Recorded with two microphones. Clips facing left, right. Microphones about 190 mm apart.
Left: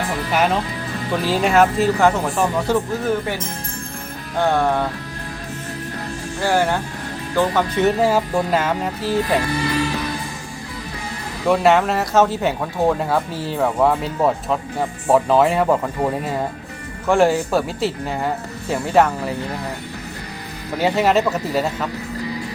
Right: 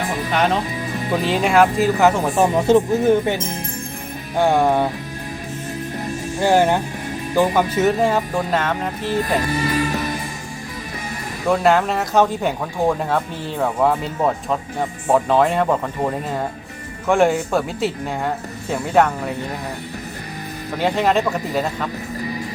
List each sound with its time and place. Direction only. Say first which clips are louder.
0.3 s speech: even; 5° left (ahead or behind)
0.9 s music: right 1 dB; 15° right (ahead or behind)
1.5 s speech: even; centre (ahead or behind)
1.7 s speech: right 1 dB; 10° right (ahead or behind)
6.4 s speech: right 3 dB; 15° right (ahead or behind)
7.9 s speech: left 1 dB; 5° left (ahead or behind)
9.6 s music: right 1 dB; 40° right (ahead or behind)
11.4 s speech: left 1 dB; centre (ahead or behind)
20.7 s speech: left 1 dB; 10° left (ahead or behind)